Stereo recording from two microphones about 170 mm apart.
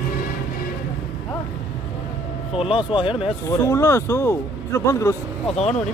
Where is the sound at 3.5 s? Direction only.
15° left (ahead or behind).